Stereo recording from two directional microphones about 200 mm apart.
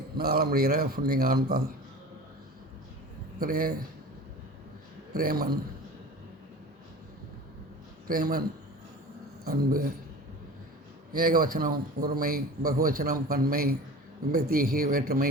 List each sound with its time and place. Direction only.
0.2 s speech: 50° right (ahead or behind)
3.4 s speech: 45° right (ahead or behind)
5.1 s speech: 50° right (ahead or behind)
8.0 s a man's voice: 45° right (ahead or behind)
11.1 s speech: 45° right (ahead or behind)